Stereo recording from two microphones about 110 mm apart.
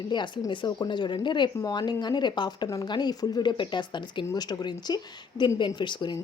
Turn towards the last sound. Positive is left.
turn(degrees=45)  # may be behind; listen again after turning